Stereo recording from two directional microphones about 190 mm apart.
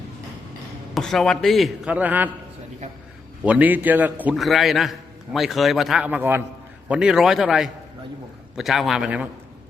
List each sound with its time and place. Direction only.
0.9 s a man's voice: centre (ahead or behind)
3.4 s a man's voice: 5° right (ahead or behind)